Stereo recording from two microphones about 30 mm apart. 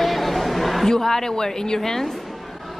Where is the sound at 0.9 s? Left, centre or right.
Centre.